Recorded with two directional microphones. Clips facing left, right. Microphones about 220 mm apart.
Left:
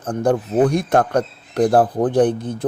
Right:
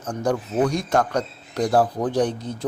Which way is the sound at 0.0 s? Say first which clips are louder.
Left 5 dB; 55° left (ahead or behind).